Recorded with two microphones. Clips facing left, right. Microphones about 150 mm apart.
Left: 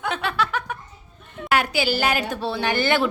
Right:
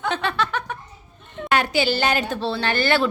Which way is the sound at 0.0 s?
5° left (ahead or behind).